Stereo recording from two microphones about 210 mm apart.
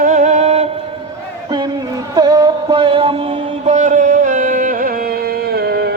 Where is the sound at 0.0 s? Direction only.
35° right (ahead or behind).